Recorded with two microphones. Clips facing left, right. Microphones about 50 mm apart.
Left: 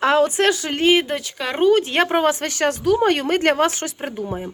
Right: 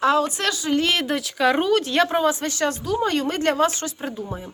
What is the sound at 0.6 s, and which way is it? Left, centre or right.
Speech, left.